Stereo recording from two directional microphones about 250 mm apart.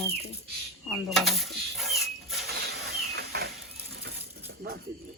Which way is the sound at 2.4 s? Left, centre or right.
Right.